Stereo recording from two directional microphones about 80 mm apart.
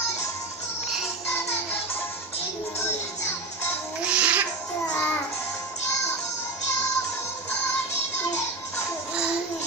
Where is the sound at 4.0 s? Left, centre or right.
Centre.